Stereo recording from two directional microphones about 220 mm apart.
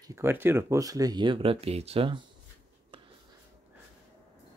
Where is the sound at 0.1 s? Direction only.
10° right (ahead or behind); by 2.1 s 25° right (ahead or behind).